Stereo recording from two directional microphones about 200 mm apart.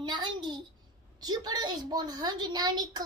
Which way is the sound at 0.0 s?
20° right (ahead or behind).